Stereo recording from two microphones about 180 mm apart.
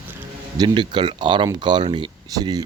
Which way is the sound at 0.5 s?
25° right (ahead or behind).